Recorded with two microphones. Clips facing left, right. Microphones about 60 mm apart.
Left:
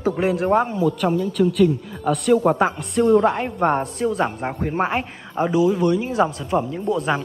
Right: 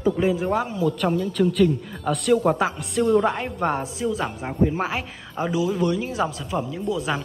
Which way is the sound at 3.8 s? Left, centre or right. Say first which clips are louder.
Left 4 dB; left.